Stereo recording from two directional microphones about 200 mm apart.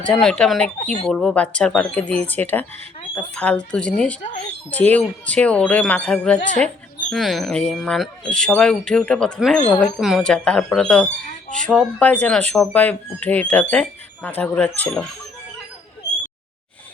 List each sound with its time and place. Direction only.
0.0 s speech: centre (ahead or behind)
4.2 s a child's voice: 40° left (ahead or behind)
4.7 s speech: 5° left (ahead or behind)